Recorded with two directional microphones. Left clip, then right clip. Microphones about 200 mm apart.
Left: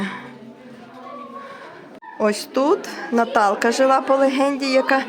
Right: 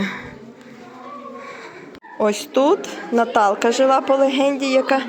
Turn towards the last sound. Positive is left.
turn(degrees=10)  # may be behind; listen again after turning